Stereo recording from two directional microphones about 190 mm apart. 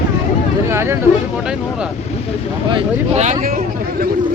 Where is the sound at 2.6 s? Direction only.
30° right (ahead or behind).